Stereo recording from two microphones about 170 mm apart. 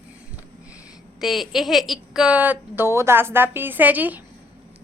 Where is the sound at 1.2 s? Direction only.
Centre (ahead or behind).